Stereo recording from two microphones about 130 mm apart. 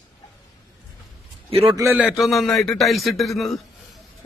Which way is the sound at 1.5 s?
45° right (ahead or behind).